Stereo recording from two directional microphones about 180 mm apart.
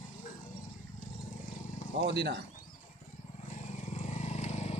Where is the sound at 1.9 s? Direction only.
70° right (ahead or behind).